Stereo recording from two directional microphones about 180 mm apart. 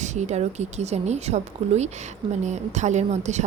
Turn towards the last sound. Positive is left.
turn(degrees=-40)  # may be behind; listen again after turning